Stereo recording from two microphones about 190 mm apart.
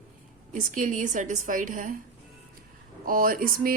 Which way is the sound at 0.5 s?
45° right (ahead or behind).